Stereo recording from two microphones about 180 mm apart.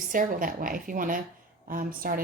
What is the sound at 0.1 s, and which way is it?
A woman's voice, 50° right (ahead or behind).